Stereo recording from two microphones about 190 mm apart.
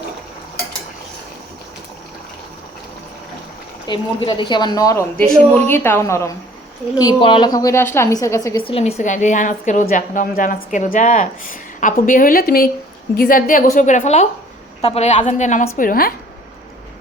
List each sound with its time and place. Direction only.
3.8 s a woman's voice: 25° left (ahead or behind)
5.1 s a woman's voice: 5° left (ahead or behind)
8.6 s a woman's voice: 30° left (ahead or behind)
15.8 s a woman's voice: 50° left (ahead or behind)